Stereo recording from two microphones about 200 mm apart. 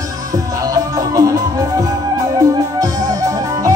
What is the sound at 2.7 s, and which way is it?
Music, 15° right (ahead or behind).